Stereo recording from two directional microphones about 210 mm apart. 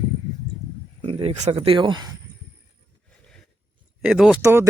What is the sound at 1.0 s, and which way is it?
Speech, 25° right (ahead or behind).